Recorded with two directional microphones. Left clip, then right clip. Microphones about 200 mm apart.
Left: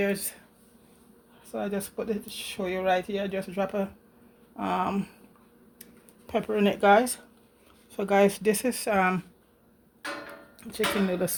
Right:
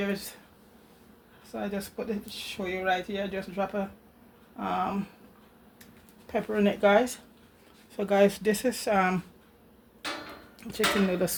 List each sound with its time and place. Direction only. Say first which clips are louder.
1.5 s speech: left 3 dB; 55° left (ahead or behind)
5.8 s a sound: left 1 dB; 45° left (ahead or behind)
7.9 s speech: left 1 dB; 30° left (ahead or behind)
10.6 s speech: right 1 dB; 10° left (ahead or behind)